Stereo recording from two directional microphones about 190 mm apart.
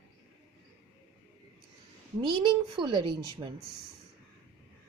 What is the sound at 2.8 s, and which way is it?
Speech, 25° right (ahead or behind).